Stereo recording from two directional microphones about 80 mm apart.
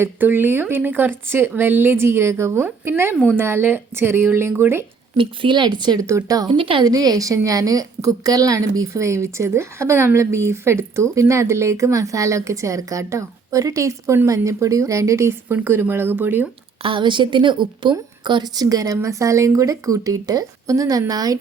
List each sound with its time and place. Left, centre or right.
0.0 s speech: right
5.1 s speech: right
6.0 s speech: right
6.5 s a woman's voice: right
6.8 s a woman's voice: right
16.9 s a woman's voice: right
18.3 s speech: right